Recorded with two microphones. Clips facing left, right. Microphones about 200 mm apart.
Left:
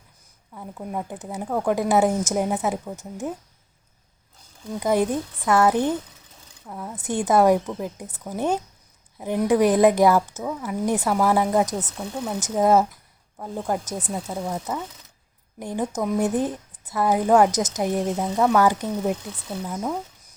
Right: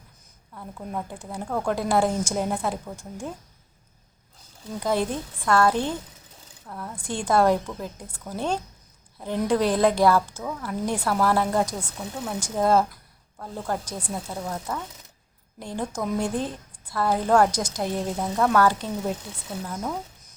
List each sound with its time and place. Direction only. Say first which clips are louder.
0.5 s speech: left 2 dB; 10° left (ahead or behind)
4.8 s speech: left 4 dB; 15° left (ahead or behind)